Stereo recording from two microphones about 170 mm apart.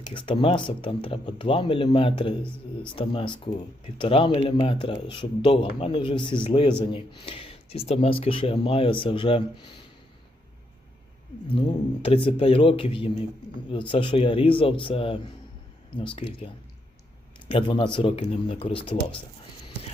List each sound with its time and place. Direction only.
0.1 s speech: 30° left (ahead or behind)
11.5 s speech: 30° left (ahead or behind)
17.5 s speech: 30° left (ahead or behind)